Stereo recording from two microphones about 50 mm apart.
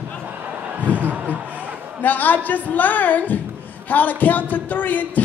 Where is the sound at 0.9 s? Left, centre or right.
Left.